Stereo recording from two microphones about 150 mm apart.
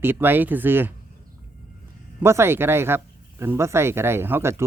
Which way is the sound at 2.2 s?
15° right (ahead or behind).